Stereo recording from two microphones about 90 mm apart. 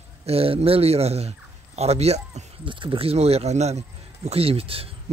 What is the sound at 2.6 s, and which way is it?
Speech, 65° right (ahead or behind).